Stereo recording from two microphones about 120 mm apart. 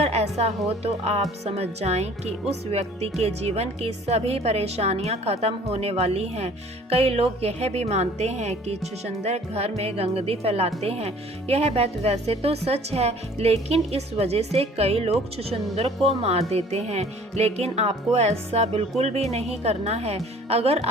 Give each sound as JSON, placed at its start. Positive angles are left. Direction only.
{"t": 0.0, "sound": "speech", "side_deg": -60}